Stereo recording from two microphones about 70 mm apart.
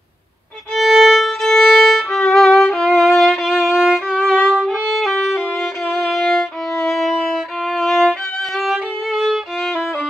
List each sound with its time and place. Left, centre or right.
0.7 s violin: centre
4.2 s violin: centre
4.6 s music: centre
5.9 s violin: centre
6.1 s violin: centre